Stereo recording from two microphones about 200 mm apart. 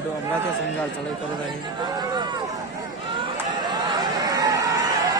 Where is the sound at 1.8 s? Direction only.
20° right (ahead or behind).